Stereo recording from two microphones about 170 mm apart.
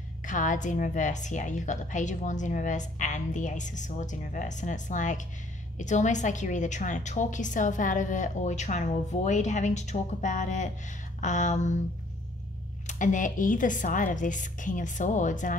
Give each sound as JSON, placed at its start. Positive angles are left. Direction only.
{"t": 0.2, "sound": "a woman's voice", "side_deg": 50}
{"t": 12.8, "sound": "a woman's voice", "side_deg": 50}